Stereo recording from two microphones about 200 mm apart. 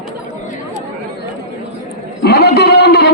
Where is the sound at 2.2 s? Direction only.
55° left (ahead or behind).